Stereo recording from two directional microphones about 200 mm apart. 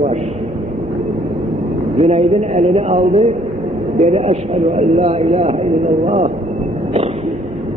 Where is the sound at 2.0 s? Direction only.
30° right (ahead or behind).